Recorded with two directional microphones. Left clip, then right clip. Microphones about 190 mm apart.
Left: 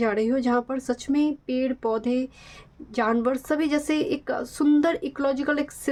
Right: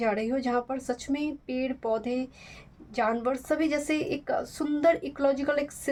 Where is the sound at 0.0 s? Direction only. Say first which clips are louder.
Left 4 dB; 30° left (ahead or behind).